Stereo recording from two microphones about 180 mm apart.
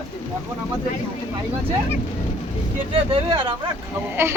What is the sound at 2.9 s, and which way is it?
Speech, 30° right (ahead or behind).